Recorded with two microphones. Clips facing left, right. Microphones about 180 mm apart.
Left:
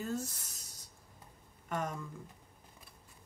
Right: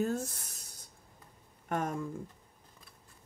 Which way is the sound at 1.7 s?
50° right (ahead or behind).